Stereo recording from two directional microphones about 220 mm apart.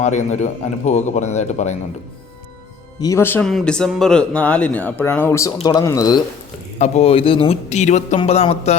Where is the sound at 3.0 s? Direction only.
15° left (ahead or behind).